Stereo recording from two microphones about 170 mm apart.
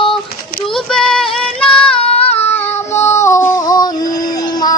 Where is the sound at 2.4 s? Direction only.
10° left (ahead or behind).